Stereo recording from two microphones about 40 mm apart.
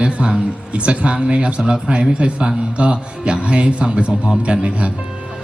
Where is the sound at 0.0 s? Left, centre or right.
Right.